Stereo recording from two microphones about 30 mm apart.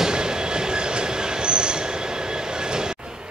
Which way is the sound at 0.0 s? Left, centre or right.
Right.